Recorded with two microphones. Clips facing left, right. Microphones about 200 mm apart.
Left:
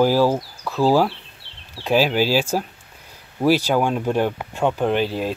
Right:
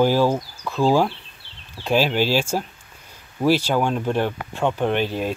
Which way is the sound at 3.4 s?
10° left (ahead or behind).